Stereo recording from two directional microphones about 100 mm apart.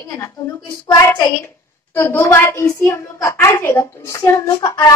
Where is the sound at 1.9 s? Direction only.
25° left (ahead or behind).